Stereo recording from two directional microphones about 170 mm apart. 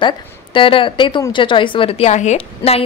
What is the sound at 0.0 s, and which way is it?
A woman's voice, 30° left (ahead or behind).